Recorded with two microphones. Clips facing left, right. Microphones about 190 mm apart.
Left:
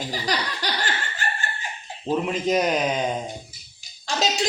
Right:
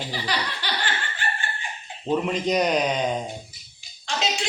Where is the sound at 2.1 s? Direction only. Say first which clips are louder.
Even; 5° left (ahead or behind).